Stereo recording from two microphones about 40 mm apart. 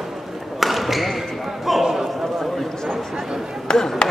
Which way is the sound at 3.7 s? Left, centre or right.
Centre.